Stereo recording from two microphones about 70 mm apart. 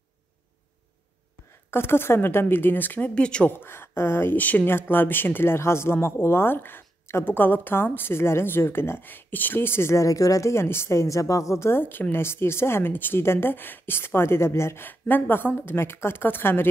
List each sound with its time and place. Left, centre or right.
1.7 s speech: left
3.2 s speech: centre
3.4 s speech: left
14.9 s a woman's voice: left